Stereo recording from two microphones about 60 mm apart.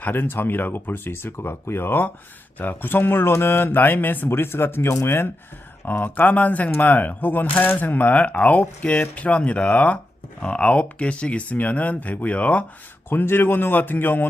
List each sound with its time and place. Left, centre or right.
0.0 s speech: left
5.8 s speech: left
13.1 s speech: left